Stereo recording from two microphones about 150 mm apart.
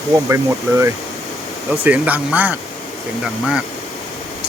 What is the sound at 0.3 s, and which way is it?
Speech, 20° right (ahead or behind).